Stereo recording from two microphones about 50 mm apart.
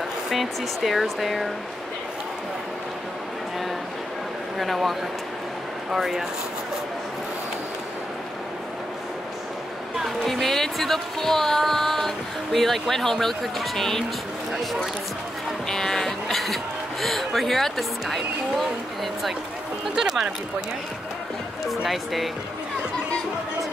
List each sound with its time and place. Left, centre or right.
0.3 s speech: centre
4.6 s speech: centre
10.2 s speech: centre
15.7 s a sound: centre
17.0 s speech: centre
20.0 s speech: centre
21.6 s speech: centre